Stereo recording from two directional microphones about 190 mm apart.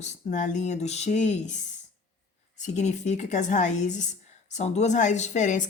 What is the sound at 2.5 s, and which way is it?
Speech, 40° left (ahead or behind).